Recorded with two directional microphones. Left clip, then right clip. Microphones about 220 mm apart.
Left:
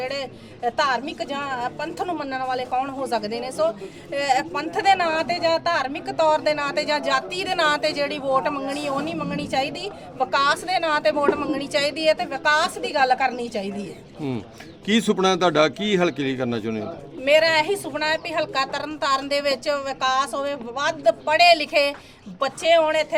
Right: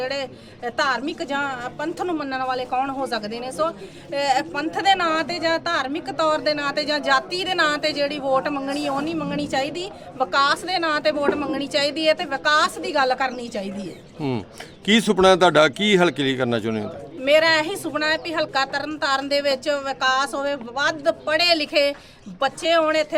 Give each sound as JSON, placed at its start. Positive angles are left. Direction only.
{"t": 0.0, "sound": "speech", "side_deg": 0}
{"t": 14.2, "sound": "a man's voice", "side_deg": -40}
{"t": 17.2, "sound": "speech", "side_deg": 0}